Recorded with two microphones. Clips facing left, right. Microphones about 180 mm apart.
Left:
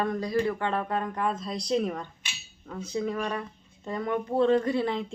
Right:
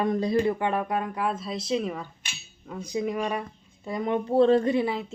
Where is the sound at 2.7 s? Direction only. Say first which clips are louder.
Right 1 dB; 15° right (ahead or behind).